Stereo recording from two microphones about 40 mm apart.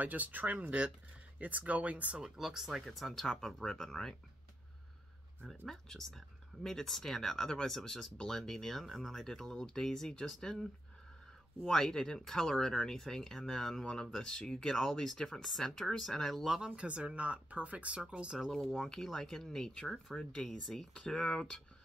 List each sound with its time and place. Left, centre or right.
0.0 s speech: right
2.1 s speech: centre
2.8 s speech: centre
5.7 s speech: centre
16.4 s speech: centre
16.7 s speech: right
18.0 s speech: right
18.8 s speech: centre